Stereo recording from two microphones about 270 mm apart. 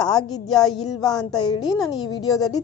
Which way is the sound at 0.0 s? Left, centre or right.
Centre.